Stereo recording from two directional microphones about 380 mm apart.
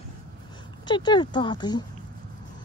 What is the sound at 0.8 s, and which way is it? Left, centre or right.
Speech, centre.